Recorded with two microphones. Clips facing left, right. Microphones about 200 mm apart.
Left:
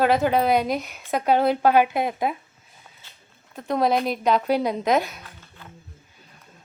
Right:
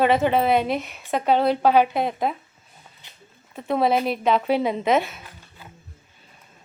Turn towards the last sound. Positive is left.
turn(degrees=0)  # may be behind; listen again after turning